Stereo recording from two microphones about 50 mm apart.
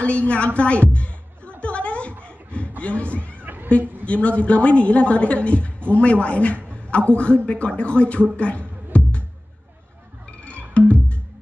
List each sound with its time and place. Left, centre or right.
0.0 s a woman's voice: left
0.6 s music: left
1.6 s a sound: left
2.2 s chuckle: left
2.8 s speech: left
3.4 s cat: right
4.0 s a woman's voice: left
8.4 s music: left
10.8 s music: left